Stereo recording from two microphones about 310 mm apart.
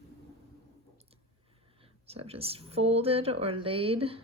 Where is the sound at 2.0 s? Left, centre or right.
Centre.